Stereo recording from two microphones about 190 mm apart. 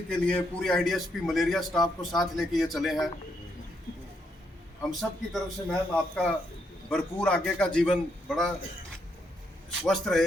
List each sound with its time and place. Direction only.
0.1 s a man's voice: 5° left (ahead or behind)
4.8 s a man's voice: centre (ahead or behind)
9.8 s a man's voice: centre (ahead or behind)